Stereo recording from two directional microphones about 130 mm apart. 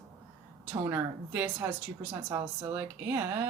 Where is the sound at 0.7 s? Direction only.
15° right (ahead or behind).